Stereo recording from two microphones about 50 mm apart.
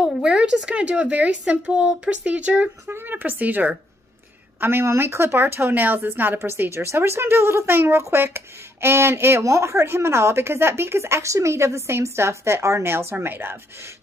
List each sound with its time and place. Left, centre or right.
0.2 s speech: centre
2.9 s speech: right
4.6 s speech: right
9.5 s speech: right